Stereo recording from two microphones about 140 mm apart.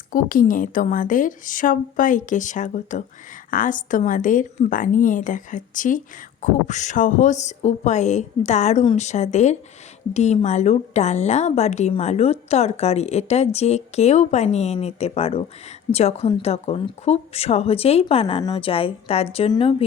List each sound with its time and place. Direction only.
0.1 s a woman's voice: 80° left; by 19.7 s 45° left (ahead or behind)